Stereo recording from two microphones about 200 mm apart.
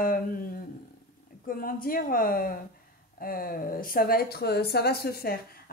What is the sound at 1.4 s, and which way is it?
Speech, 45° left (ahead or behind).